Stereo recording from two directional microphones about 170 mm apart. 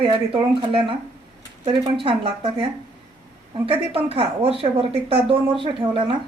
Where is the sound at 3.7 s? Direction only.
35° right (ahead or behind).